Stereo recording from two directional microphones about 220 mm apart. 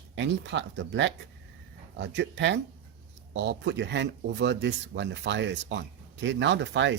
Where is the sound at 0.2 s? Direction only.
55° right (ahead or behind).